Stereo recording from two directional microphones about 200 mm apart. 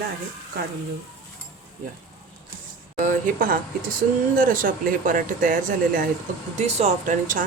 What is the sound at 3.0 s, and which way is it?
Speech, 40° right (ahead or behind).